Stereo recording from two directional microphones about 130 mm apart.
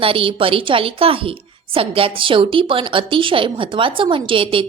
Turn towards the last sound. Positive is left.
turn(degrees=-45)  # may be behind; listen again after turning